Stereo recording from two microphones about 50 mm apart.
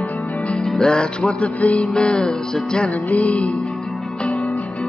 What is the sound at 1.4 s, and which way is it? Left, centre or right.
Music, left.